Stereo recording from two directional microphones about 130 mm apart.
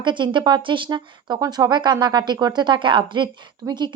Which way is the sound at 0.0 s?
40° right (ahead or behind).